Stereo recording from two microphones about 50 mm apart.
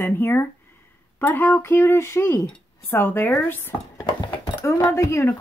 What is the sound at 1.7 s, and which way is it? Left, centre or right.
Speech, left.